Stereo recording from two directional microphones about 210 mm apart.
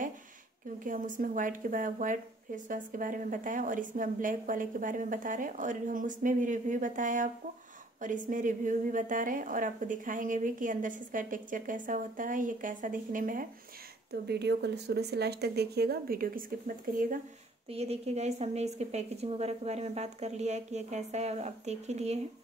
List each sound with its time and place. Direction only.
0.8 s speech: 40° right (ahead or behind)
14.2 s speech: 50° right (ahead or behind)
17.6 s speech: 30° right (ahead or behind)